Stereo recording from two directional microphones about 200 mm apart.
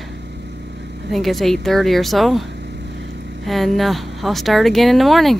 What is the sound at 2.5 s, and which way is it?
Vehicle, 55° right (ahead or behind).